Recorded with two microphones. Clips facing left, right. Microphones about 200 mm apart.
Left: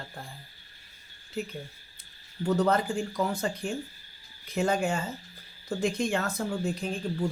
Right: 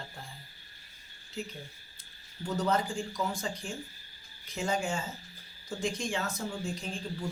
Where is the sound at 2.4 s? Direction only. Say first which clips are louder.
Left 5 dB; 60° left (ahead or behind).